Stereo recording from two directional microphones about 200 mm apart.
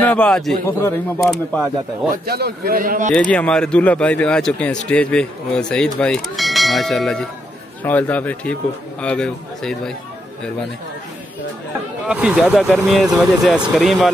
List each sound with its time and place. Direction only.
0.0 s speech: 5° left (ahead or behind)
1.2 s speech: centre (ahead or behind)
2.2 s a man's voice: 50° right (ahead or behind)
3.2 s speech: 5° left (ahead or behind)
12.1 s speech: 5° right (ahead or behind)